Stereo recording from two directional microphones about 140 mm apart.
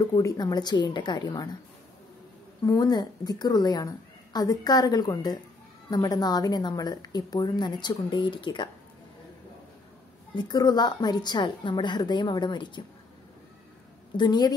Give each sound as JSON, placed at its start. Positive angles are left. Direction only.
{"t": 0.1, "sound": "a woman's voice", "side_deg": 25}
{"t": 2.6, "sound": "a woman's voice", "side_deg": 25}
{"t": 10.3, "sound": "a woman's voice", "side_deg": 30}
{"t": 14.1, "sound": "a woman's voice", "side_deg": 30}